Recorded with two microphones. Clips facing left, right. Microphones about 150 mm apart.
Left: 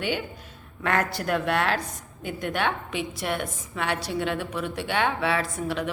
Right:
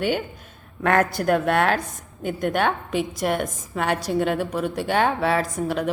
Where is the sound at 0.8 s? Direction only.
50° right (ahead or behind).